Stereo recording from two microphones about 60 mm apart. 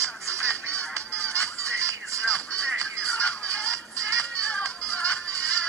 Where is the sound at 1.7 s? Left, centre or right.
Right.